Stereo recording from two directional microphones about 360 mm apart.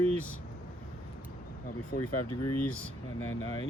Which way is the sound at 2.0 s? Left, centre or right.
Left.